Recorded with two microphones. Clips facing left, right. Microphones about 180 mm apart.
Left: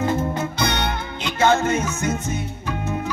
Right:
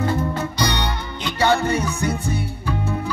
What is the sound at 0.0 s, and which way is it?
Music, 20° left (ahead or behind).